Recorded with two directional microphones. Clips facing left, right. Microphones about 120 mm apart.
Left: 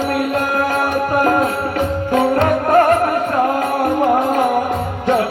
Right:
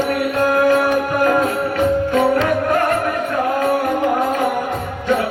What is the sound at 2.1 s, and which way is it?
Music, 40° left (ahead or behind).